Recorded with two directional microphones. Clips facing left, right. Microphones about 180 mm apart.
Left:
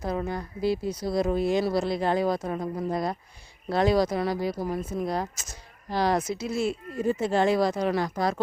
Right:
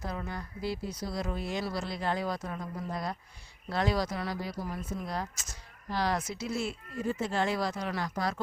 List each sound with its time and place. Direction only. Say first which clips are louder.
0.0 s speech: left 8 dB; 25° left (ahead or behind)